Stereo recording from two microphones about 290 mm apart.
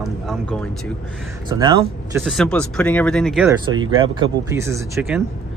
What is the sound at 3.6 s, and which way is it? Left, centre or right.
Speech, centre.